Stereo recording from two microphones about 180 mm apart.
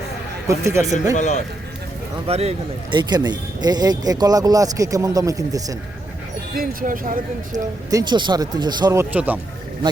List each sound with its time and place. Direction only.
0.4 s a man's voice: 15° right (ahead or behind)
1.1 s speech: 40° left (ahead or behind)
2.2 s speech: 35° right (ahead or behind); by 5.7 s 20° right (ahead or behind)
6.5 s speech: 50° right (ahead or behind)
7.5 s speech: 20° right (ahead or behind)